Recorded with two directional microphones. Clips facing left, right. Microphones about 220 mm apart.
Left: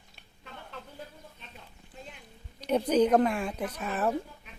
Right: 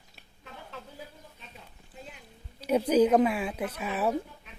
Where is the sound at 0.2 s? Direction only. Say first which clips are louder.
Even; centre (ahead or behind).